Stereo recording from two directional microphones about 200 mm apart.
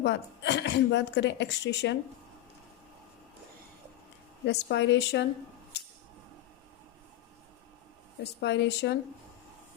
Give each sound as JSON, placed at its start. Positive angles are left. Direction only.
{"t": 0.0, "sound": "speech", "side_deg": 60}
{"t": 4.4, "sound": "speech", "side_deg": 60}
{"t": 5.7, "sound": "a sound", "side_deg": 55}
{"t": 8.2, "sound": "speech", "side_deg": 60}